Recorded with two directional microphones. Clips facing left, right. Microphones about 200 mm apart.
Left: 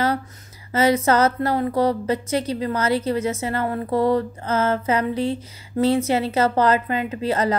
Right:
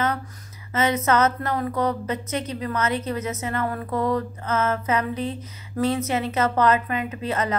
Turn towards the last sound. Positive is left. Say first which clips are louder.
# left 4 dB
turn(degrees=30)  # may be behind; listen again after turning